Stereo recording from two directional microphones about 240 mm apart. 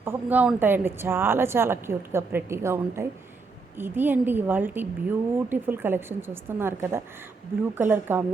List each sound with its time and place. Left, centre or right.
0.0 s a woman's voice: centre